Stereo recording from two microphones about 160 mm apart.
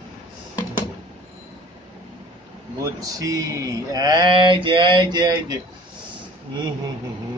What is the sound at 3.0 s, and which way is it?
Mantra, 20° right (ahead or behind).